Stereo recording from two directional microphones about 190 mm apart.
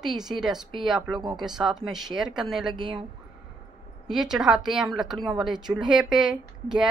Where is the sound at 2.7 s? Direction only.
25° right (ahead or behind).